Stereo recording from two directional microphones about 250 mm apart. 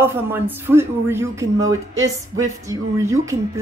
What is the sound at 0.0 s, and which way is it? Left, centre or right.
A woman's voice, centre.